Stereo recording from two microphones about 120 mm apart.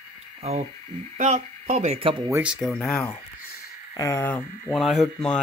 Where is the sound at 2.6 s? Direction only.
10° left (ahead or behind).